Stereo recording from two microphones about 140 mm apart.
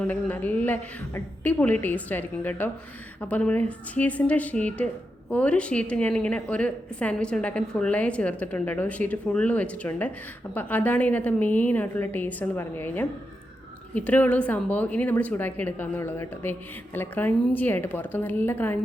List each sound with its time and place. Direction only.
0.0 s a woman's voice: 10° left (ahead or behind)